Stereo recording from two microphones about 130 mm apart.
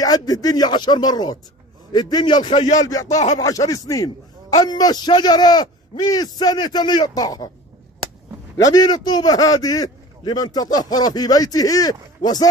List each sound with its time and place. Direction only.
0.0 s a man's voice: 30° left (ahead or behind)
2.5 s speech: 60° left (ahead or behind)
2.8 s a man's voice: 30° left (ahead or behind)
8.6 s a man's voice: 30° left (ahead or behind)